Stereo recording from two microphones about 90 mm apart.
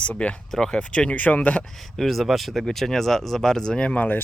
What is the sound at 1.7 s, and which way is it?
Speech, centre (ahead or behind).